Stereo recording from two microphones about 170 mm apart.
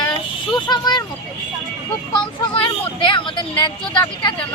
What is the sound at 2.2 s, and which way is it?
Speech, 30° left (ahead or behind).